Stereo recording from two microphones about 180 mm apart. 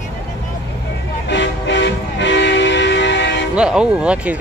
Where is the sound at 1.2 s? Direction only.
75° left (ahead or behind).